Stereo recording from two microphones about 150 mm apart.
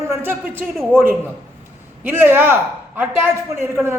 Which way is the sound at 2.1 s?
15° right (ahead or behind).